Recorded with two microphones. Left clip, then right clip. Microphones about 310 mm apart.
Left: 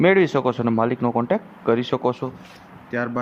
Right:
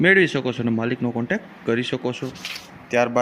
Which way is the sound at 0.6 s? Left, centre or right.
Left.